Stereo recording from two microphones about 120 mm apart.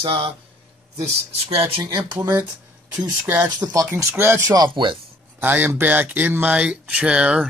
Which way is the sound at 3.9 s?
20° right (ahead or behind).